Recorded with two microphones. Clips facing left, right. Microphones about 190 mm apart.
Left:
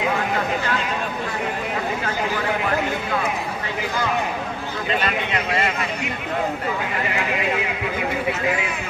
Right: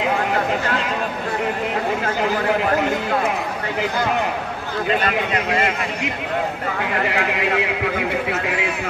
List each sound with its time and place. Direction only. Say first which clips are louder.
7.1 s speech: even; 80° right